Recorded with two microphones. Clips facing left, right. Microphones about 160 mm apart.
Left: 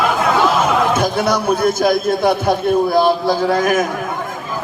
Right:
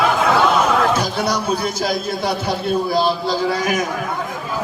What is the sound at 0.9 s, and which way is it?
A man's voice, 50° left (ahead or behind).